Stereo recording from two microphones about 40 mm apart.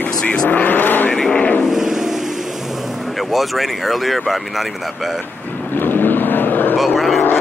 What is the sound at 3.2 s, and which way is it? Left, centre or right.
Speech, centre.